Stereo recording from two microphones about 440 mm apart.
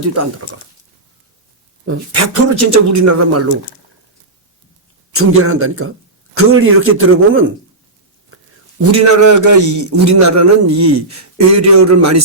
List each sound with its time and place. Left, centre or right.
1.8 s a man's voice: right
5.1 s a man's voice: right
8.8 s a man's voice: right